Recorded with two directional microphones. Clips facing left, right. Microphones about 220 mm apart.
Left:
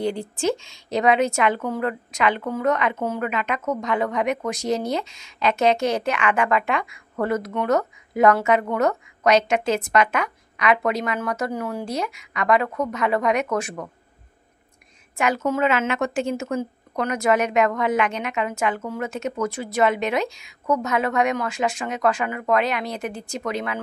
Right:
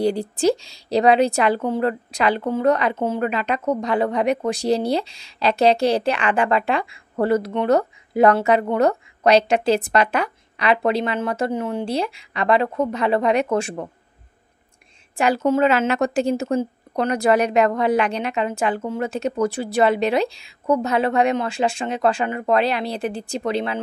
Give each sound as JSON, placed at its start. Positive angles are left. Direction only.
{"t": 0.0, "sound": "a woman's voice", "side_deg": -35}
{"t": 15.1, "sound": "a woman's voice", "side_deg": -30}